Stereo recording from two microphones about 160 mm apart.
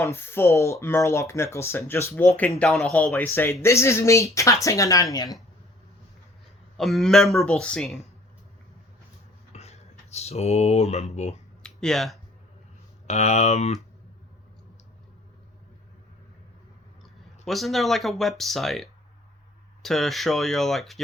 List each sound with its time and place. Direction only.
0.0 s speech: 15° left (ahead or behind)
6.7 s speech: centre (ahead or behind)
9.5 s speech: 40° left (ahead or behind)
11.6 s a sound: 5° left (ahead or behind)
13.1 s speech: 45° left (ahead or behind)
17.4 s speech: centre (ahead or behind)